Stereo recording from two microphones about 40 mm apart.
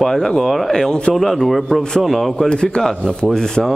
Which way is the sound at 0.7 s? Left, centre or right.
Centre.